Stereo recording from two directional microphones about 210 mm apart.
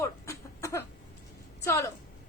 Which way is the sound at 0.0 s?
15° left (ahead or behind).